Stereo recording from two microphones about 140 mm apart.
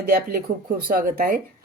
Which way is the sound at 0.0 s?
90° right.